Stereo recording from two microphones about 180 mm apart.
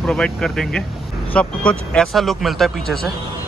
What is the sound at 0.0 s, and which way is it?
Speech, 5° left (ahead or behind).